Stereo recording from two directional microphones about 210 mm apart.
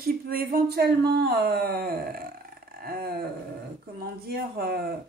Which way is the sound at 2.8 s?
45° right (ahead or behind).